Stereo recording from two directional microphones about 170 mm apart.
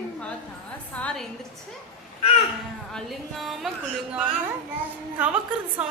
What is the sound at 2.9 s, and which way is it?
Speech, centre (ahead or behind).